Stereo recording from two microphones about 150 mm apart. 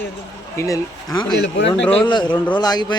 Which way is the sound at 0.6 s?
20° left (ahead or behind).